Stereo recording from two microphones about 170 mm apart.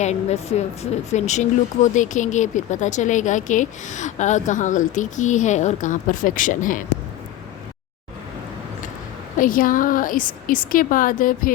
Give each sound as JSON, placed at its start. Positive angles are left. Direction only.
{"t": 0.0, "sound": "speech", "side_deg": 40}
{"t": 9.4, "sound": "speech", "side_deg": 55}